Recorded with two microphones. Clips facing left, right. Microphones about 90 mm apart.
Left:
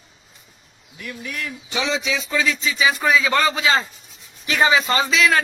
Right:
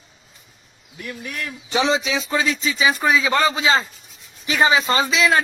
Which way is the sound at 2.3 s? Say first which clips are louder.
Right 1 dB; 30° right (ahead or behind).